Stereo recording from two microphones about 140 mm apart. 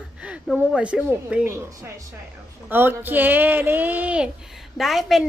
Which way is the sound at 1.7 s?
25° right (ahead or behind).